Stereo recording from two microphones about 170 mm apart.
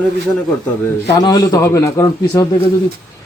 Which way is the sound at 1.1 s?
25° left (ahead or behind).